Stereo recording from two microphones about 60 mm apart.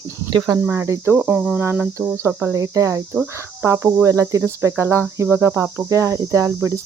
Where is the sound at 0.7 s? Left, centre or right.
Right.